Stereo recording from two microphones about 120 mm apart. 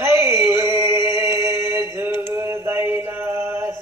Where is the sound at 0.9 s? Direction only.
40° left (ahead or behind).